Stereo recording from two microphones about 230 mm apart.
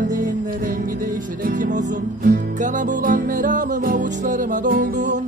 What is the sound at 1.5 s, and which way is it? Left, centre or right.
Music, right.